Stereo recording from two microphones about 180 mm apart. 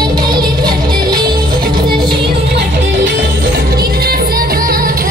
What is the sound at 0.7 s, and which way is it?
Music, 25° right (ahead or behind).